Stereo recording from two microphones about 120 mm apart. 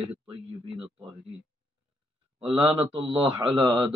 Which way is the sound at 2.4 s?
55° right (ahead or behind).